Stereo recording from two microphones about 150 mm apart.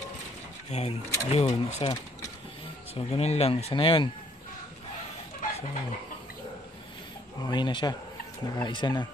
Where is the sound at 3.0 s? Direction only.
45° left (ahead or behind).